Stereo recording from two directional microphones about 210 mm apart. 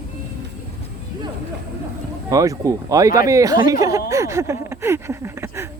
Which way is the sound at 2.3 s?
15° right (ahead or behind).